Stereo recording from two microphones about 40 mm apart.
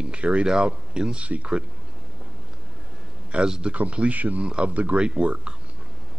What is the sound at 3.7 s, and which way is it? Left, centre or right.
Speech, right.